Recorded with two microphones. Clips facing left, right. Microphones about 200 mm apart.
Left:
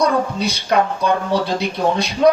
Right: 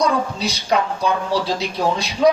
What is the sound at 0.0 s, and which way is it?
A woman's voice, 55° left (ahead or behind).